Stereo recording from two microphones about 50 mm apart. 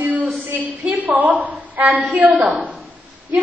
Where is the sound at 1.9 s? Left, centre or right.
Right.